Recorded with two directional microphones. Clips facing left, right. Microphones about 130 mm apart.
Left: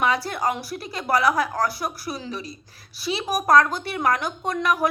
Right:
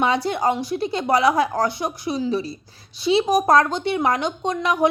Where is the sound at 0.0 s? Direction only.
25° right (ahead or behind).